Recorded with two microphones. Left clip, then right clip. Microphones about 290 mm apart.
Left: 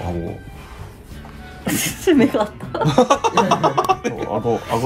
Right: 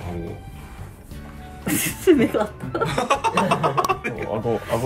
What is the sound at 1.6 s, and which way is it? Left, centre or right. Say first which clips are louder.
Speech: even; centre.